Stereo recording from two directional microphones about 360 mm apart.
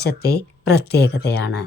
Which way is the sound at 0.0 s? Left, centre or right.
Left.